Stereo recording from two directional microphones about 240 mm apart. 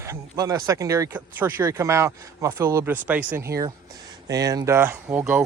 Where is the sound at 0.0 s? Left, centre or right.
Centre.